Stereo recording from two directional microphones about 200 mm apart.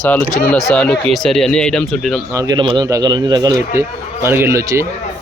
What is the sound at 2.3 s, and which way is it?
Speech, 15° right (ahead or behind).